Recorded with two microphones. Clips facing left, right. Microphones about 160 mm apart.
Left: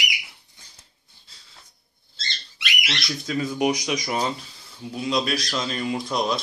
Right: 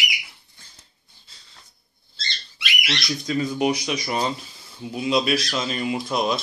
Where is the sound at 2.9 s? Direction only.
5° left (ahead or behind).